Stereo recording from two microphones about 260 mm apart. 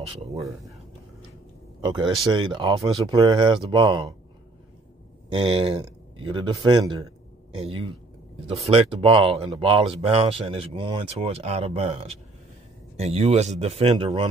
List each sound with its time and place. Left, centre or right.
1.9 s speech: centre
5.3 s speech: centre